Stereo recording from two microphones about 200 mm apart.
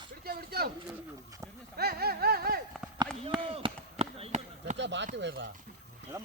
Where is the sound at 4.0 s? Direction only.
30° right (ahead or behind).